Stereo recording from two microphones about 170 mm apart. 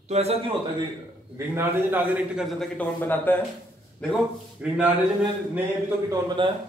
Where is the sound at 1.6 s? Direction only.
10° right (ahead or behind).